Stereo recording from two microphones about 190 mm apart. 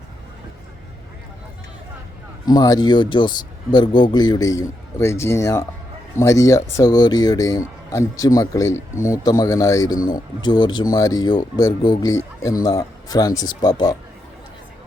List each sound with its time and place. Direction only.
2.5 s speech: 20° left (ahead or behind)